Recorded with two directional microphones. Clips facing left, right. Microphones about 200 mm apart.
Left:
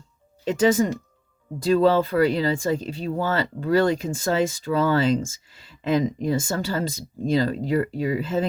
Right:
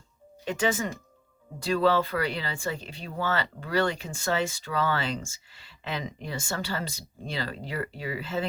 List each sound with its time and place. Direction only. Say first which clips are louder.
0.4 s speech: left 8 dB; 35° left (ahead or behind)